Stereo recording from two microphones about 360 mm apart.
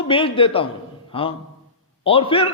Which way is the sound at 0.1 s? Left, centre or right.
Centre.